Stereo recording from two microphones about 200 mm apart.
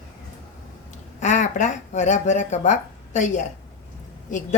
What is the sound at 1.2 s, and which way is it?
A woman's voice, 35° left (ahead or behind).